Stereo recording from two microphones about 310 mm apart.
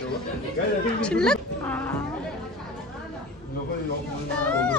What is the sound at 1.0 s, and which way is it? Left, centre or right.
Speech, centre.